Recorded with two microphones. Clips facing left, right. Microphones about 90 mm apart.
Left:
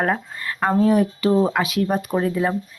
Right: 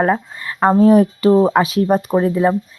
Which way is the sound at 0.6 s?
30° right (ahead or behind).